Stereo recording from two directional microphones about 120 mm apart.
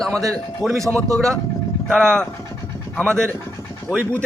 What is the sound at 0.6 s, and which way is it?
Speech, 25° right (ahead or behind).